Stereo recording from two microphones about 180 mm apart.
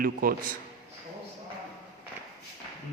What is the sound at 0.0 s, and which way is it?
Speech, 55° right (ahead or behind).